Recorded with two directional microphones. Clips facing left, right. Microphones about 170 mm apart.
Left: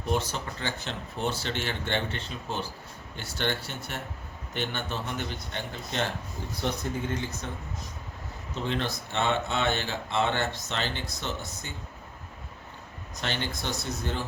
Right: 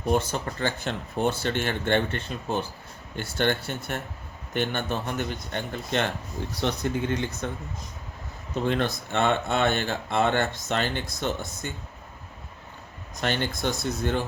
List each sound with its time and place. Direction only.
0.1 s speech: 50° right (ahead or behind)
6.6 s speech: 80° right
7.4 s speech: 55° right (ahead or behind)
8.6 s speech: 50° right (ahead or behind)
13.2 s speech: 50° right (ahead or behind)